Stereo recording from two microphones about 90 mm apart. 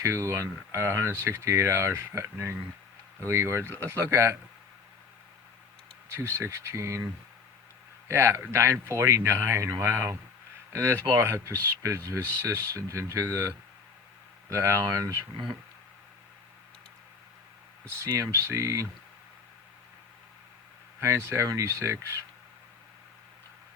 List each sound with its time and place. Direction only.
0.0 s speech: 35° right (ahead or behind)
6.1 s speech: 30° right (ahead or behind)
14.5 s speech: 35° right (ahead or behind)
18.2 s speech: 35° right (ahead or behind)
21.0 s speech: 30° right (ahead or behind)